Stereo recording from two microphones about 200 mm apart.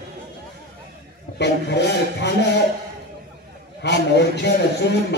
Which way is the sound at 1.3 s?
60° left (ahead or behind).